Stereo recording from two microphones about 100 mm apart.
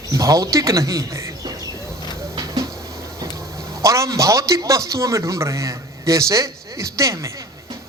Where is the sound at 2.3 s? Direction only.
35° right (ahead or behind).